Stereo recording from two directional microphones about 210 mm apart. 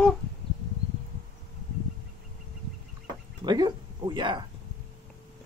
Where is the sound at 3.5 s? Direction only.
20° right (ahead or behind).